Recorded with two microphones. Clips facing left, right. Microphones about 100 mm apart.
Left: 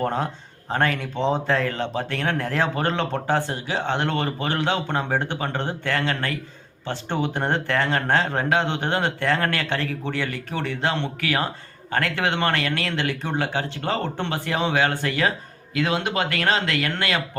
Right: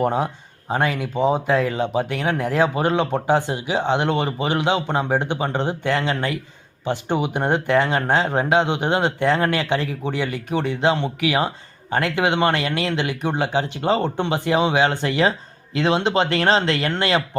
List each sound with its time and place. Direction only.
0.0 s speech: 15° right (ahead or behind)